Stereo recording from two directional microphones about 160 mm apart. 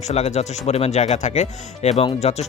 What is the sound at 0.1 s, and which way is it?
Speech, 45° left (ahead or behind).